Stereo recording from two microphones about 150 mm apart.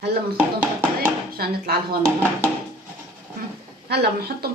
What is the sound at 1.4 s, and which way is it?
Speech, 90° right.